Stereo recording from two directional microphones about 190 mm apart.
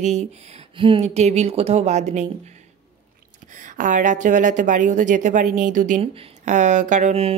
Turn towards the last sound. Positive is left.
turn(degrees=-35)  # may be behind; listen again after turning